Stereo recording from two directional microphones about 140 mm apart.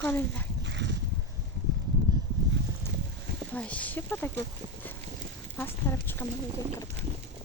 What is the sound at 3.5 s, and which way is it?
Speech, 10° left (ahead or behind).